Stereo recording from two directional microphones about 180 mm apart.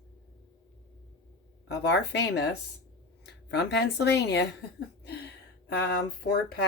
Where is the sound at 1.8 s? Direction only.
70° left (ahead or behind).